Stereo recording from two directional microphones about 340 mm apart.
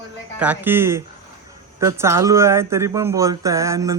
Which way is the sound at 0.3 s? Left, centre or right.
Centre.